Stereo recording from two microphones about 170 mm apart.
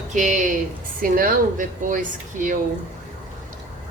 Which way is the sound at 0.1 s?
45° right (ahead or behind).